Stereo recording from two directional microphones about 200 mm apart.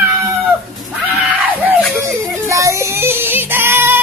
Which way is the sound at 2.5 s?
15° right (ahead or behind).